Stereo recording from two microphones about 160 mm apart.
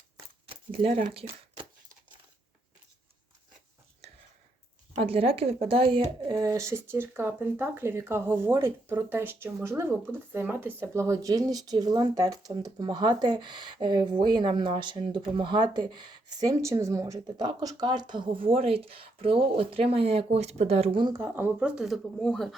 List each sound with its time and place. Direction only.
0.4 s a sound: 35° right (ahead or behind)
1.1 s speech: 35° right (ahead or behind)
4.9 s speech: 35° right (ahead or behind)
21.2 s speech: 15° right (ahead or behind); by 22.4 s 5° left (ahead or behind)